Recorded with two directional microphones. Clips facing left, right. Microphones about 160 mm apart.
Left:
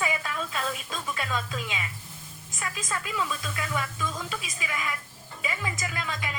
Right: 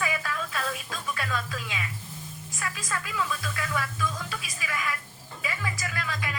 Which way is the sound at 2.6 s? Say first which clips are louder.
Left 1 dB; 20° left (ahead or behind).